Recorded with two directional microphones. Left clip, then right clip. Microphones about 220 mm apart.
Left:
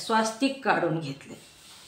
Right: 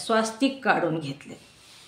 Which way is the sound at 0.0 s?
35° right (ahead or behind).